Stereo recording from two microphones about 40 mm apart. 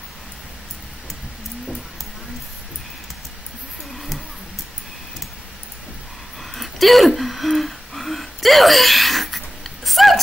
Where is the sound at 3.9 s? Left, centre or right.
Centre.